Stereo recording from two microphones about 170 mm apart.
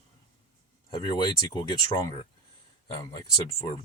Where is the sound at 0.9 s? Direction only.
25° left (ahead or behind).